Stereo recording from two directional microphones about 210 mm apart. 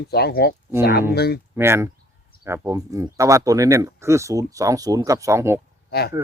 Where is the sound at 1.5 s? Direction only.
10° right (ahead or behind).